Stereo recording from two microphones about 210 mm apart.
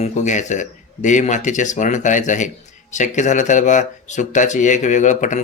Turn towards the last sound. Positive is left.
turn(degrees=35)  # may be behind; listen again after turning